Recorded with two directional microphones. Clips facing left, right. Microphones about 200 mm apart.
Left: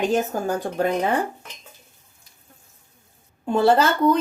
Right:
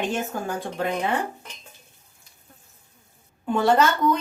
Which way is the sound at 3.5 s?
30° left (ahead or behind).